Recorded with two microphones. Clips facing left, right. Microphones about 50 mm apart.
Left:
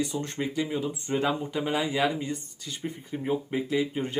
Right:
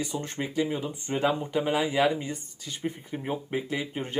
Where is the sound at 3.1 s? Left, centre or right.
Centre.